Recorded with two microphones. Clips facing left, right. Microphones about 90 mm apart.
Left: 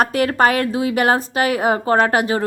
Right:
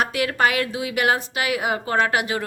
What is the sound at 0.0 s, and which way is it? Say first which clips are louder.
A woman's voice: left 5 dB; 40° left (ahead or behind).